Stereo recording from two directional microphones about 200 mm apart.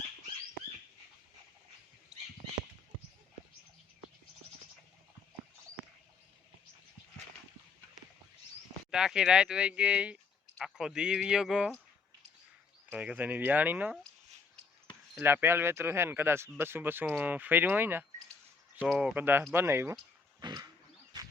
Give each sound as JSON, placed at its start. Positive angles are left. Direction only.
{"t": 8.9, "sound": "speech", "side_deg": -5}
{"t": 12.9, "sound": "speech", "side_deg": -5}
{"t": 15.1, "sound": "speech", "side_deg": -10}
{"t": 20.4, "sound": "wild animals", "side_deg": -20}